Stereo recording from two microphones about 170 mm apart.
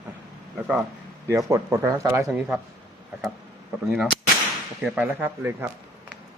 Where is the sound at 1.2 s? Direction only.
20° right (ahead or behind).